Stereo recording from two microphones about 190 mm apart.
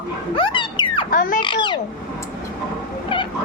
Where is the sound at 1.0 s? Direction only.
45° left (ahead or behind).